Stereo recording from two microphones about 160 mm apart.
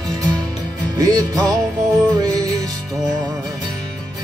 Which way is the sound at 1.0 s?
25° right (ahead or behind).